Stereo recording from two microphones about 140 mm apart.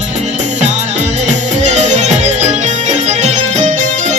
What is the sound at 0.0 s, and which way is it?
Music, 55° right (ahead or behind).